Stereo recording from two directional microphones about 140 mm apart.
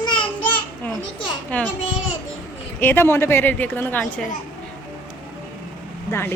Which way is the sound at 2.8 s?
15° left (ahead or behind).